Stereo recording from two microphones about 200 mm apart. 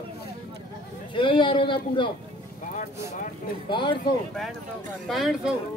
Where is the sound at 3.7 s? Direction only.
25° left (ahead or behind).